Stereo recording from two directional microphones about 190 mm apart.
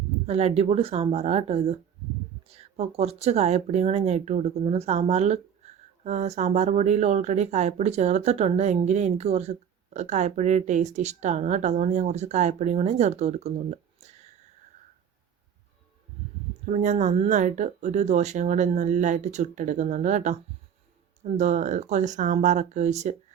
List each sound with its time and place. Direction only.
0.3 s speech: 35° right (ahead or behind)
16.6 s speech: 40° right (ahead or behind)